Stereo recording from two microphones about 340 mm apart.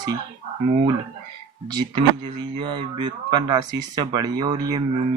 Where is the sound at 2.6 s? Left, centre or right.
Centre.